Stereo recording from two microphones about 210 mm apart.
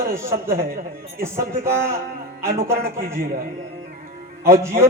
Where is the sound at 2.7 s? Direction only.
45° right (ahead or behind).